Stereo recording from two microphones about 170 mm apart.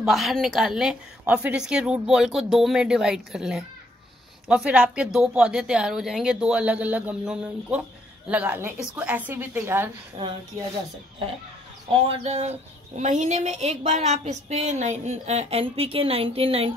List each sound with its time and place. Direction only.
0.0 s a woman's voice: centre (ahead or behind)
10.2 s speech: 25° right (ahead or behind)
12.1 s speech: 40° right (ahead or behind)